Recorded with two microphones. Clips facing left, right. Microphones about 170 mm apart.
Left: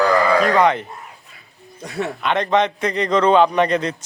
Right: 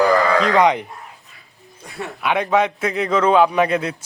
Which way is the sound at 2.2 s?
10° right (ahead or behind).